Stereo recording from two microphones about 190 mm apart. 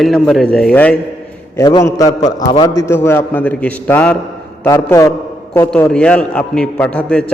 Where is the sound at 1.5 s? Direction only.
20° left (ahead or behind).